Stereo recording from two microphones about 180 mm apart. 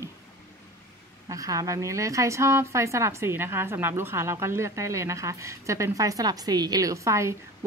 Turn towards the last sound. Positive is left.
turn(degrees=-15)  # may be behind; listen again after turning